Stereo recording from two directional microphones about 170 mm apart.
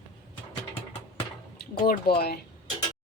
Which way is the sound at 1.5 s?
70° left (ahead or behind).